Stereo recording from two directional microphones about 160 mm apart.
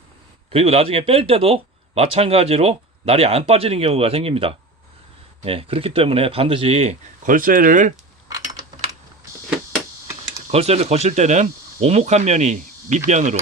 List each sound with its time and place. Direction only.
0.5 s speech: 35° right (ahead or behind)
7.3 s speech: 55° right (ahead or behind)
10.5 s speech: 40° right (ahead or behind)